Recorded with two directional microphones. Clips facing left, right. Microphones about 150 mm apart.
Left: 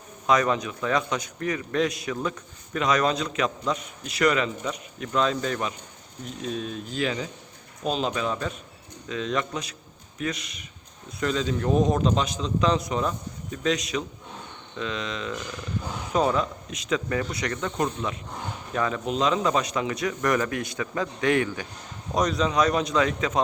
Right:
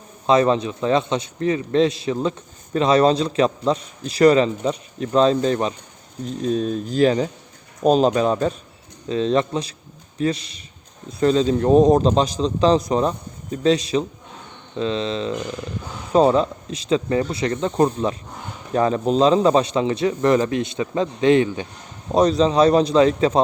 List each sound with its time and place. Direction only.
0.3 s a man's voice: 30° right (ahead or behind)